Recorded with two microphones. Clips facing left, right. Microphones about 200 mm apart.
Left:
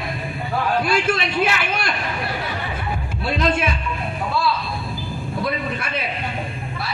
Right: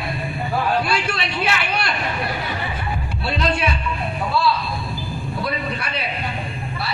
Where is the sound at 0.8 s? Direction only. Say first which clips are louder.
Left 3 dB; 50° left (ahead or behind).